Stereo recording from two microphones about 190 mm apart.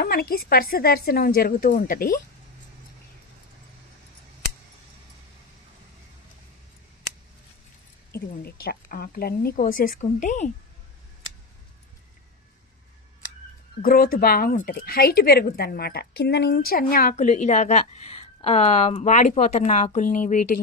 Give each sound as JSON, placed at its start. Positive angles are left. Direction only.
{"t": 0.0, "sound": "speech", "side_deg": 55}
{"t": 8.1, "sound": "a woman's voice", "side_deg": 55}
{"t": 13.7, "sound": "speech", "side_deg": 50}
{"t": 17.1, "sound": "a woman's voice", "side_deg": 35}